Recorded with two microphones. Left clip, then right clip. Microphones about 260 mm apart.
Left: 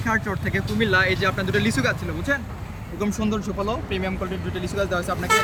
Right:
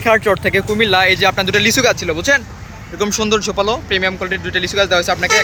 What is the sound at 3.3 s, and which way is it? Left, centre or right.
Speech, centre.